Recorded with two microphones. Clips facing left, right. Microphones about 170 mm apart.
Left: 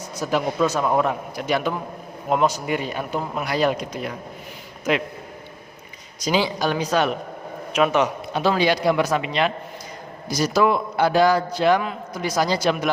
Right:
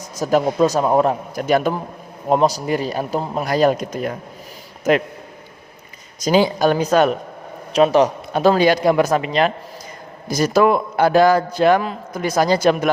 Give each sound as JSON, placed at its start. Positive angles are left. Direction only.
{"t": 0.2, "sound": "a man's voice", "side_deg": -40}
{"t": 6.1, "sound": "a man's voice", "side_deg": -45}
{"t": 7.7, "sound": "a man's voice", "side_deg": -35}
{"t": 8.3, "sound": "a man's voice", "side_deg": -45}